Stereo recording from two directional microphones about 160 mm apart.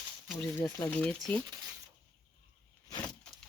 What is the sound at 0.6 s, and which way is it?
Speech, 10° left (ahead or behind).